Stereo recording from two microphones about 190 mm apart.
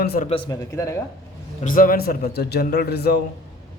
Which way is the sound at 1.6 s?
45° left (ahead or behind).